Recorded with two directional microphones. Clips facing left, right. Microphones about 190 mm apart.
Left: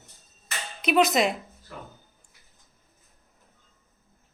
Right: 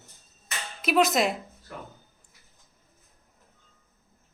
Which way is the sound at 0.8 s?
Centre (ahead or behind).